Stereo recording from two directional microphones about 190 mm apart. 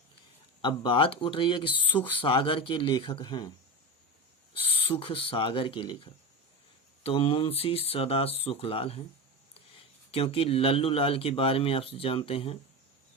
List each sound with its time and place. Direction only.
0.6 s speech: 25° left (ahead or behind)
4.7 s speech: 30° left (ahead or behind)
7.0 s speech: 30° left (ahead or behind)
10.1 s speech: 30° left (ahead or behind)